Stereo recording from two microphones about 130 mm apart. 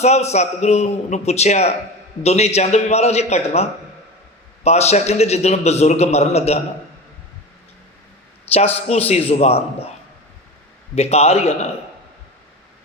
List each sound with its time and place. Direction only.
0.0 s a man's voice: 55° left (ahead or behind)
8.5 s a man's voice: 50° left (ahead or behind)
10.9 s a man's voice: 55° left (ahead or behind)